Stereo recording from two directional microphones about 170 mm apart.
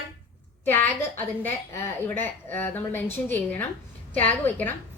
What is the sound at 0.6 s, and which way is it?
A woman's voice, 10° left (ahead or behind).